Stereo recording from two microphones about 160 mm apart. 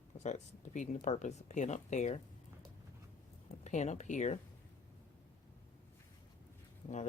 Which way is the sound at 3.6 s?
45° left (ahead or behind).